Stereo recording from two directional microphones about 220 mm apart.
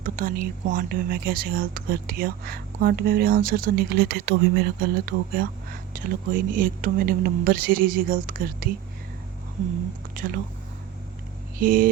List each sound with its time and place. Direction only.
0.0 s speech: 40° right (ahead or behind)
10.2 s speech: 40° right (ahead or behind)
11.6 s speech: 40° right (ahead or behind)